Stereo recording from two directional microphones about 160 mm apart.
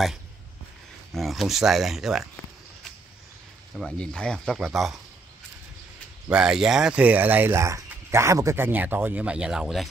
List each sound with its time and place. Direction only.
1.1 s speech: centre (ahead or behind)
3.7 s speech: 5° left (ahead or behind)
6.2 s speech: 5° right (ahead or behind)